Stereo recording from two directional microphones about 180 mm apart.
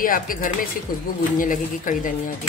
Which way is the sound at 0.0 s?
50° left (ahead or behind).